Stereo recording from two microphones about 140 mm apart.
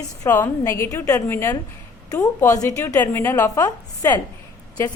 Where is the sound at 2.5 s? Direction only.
20° left (ahead or behind).